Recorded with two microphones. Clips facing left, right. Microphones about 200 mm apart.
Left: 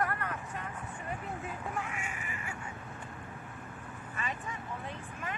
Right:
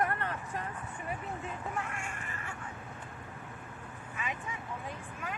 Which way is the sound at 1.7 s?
Centre (ahead or behind).